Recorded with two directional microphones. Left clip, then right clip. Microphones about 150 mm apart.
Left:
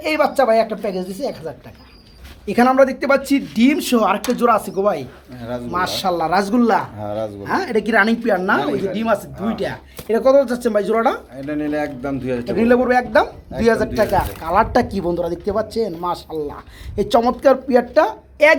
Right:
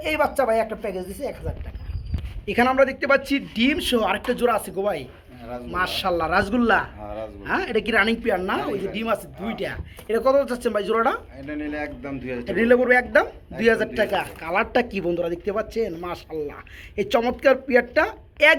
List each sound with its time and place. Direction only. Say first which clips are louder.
0.0 s speech: left 5 dB; centre (ahead or behind)
7.0 s speech: left 8 dB; 45° left (ahead or behind)
7.4 s speech: left 3 dB; 15° right (ahead or behind)
11.4 s a man's voice: left 10 dB; 40° left (ahead or behind)
12.6 s speech: left 2 dB; 45° right (ahead or behind)
13.6 s speech: left 4 dB; 15° right (ahead or behind)
14.9 s speech: left 4 dB; 35° right (ahead or behind)
15.8 s speech: left 6 dB; 5° right (ahead or behind)